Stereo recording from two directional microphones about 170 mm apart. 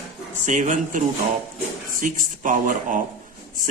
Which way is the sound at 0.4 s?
45° right (ahead or behind).